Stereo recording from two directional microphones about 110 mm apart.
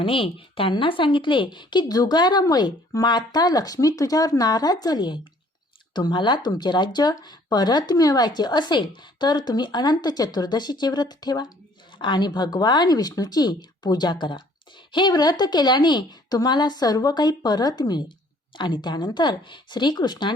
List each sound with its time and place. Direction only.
0.0 s speech: 55° left (ahead or behind)